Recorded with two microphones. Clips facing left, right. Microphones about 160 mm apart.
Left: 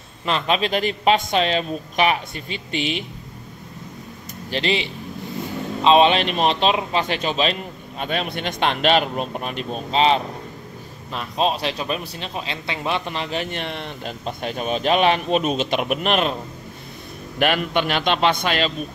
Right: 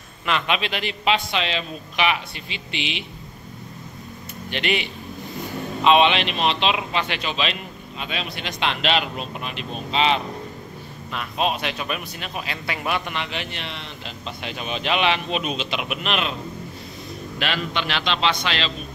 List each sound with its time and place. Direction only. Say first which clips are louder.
0.2 s speech: left 3 dB; 35° left (ahead or behind)
4.5 s a man's voice: left 2 dB; 30° left (ahead or behind)
5.9 s a man's voice: left 2 dB; 40° left (ahead or behind)
17.4 s speech: left 7 dB; 50° left (ahead or behind)